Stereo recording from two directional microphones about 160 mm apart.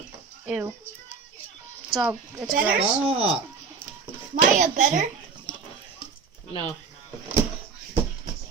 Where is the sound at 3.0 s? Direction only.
35° right (ahead or behind).